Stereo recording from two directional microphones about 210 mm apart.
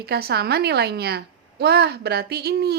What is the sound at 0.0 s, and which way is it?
A woman's voice, 50° right (ahead or behind).